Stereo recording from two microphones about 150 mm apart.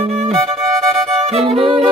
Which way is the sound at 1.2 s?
40° right (ahead or behind).